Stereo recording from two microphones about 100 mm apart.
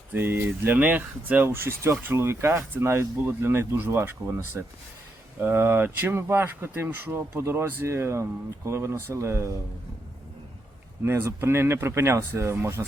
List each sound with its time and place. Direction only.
0.1 s speech: 20° right (ahead or behind)
11.0 s speech: 25° right (ahead or behind)